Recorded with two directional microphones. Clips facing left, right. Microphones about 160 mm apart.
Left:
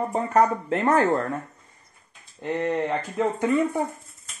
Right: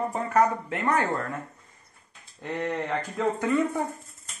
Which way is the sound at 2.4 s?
20° left (ahead or behind).